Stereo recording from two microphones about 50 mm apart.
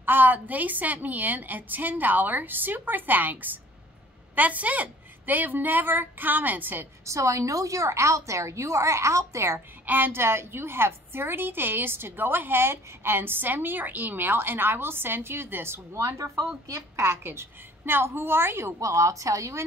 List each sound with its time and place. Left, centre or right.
0.0 s a woman's voice: right
7.1 s a woman's voice: right
9.8 s a woman's voice: right
15.9 s speech: right
17.0 s a woman's voice: right
18.8 s a woman's voice: right